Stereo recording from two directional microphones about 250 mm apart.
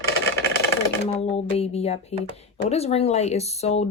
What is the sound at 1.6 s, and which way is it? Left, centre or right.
Speech, left.